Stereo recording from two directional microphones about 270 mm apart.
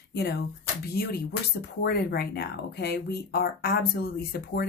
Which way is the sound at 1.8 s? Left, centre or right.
Left.